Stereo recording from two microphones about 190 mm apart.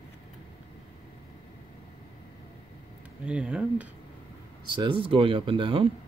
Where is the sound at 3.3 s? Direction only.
5° right (ahead or behind).